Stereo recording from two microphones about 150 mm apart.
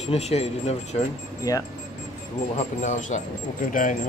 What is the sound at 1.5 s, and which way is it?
Speech, 25° left (ahead or behind).